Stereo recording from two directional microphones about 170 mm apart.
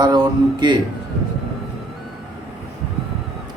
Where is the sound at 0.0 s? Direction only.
25° right (ahead or behind).